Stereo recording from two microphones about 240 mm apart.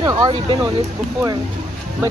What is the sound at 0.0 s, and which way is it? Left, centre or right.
Speech, centre.